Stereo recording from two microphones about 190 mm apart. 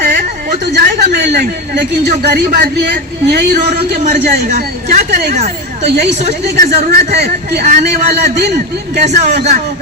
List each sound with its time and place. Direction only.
0.0 s a sound: 45° right (ahead or behind)
0.7 s a sound: 60° right (ahead or behind)
1.7 s a man's voice: 60° right (ahead or behind)
4.0 s a woman's voice: 40° right (ahead or behind)
5.8 s a man's voice: 60° right (ahead or behind)
6.1 s speech: 35° right (ahead or behind)
7.1 s a man's voice: 60° right (ahead or behind)
7.6 s speech: 40° right (ahead or behind)